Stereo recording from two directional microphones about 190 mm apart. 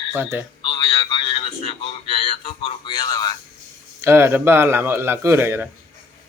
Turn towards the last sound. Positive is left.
turn(degrees=-10)  # may be behind; listen again after turning